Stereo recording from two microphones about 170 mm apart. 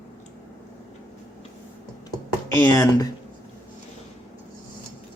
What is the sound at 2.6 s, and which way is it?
Speech, 15° left (ahead or behind).